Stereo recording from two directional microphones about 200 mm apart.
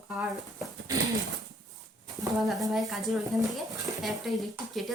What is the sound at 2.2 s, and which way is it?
Speech, centre (ahead or behind).